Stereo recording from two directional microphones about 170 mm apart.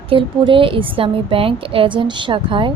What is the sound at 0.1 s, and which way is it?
A woman's voice, 30° right (ahead or behind).